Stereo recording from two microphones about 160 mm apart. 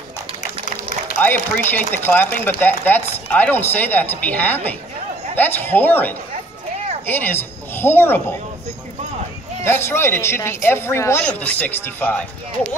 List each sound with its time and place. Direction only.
1.2 s speech: 10° left (ahead or behind)
9.7 s speech: 15° left (ahead or behind)